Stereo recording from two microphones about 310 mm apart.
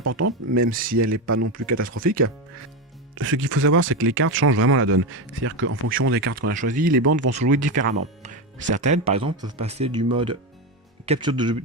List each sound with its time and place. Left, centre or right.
0.0 s speech: right
3.2 s speech: right
6.3 s speech: right
8.2 s music: right
8.7 s speech: right